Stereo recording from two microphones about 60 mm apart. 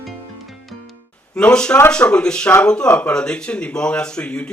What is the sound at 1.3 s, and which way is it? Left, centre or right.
Speech, centre.